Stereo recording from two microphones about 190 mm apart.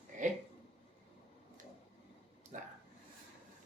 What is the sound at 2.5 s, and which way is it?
Speech, 40° right (ahead or behind).